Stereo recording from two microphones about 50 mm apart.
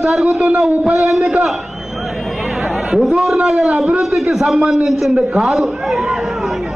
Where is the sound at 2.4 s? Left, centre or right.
Centre.